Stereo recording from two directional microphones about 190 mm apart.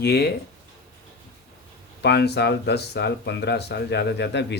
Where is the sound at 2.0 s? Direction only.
60° left (ahead or behind).